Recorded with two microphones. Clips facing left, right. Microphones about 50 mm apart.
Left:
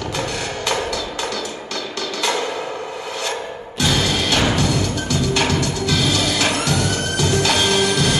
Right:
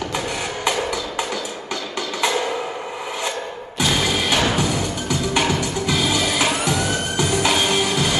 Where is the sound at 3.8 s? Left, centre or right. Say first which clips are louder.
Left 1 dB; centre.